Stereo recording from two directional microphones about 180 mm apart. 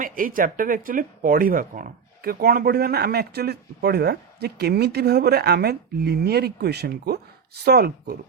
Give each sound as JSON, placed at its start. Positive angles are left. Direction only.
{"t": 0.0, "sound": "speech", "side_deg": -50}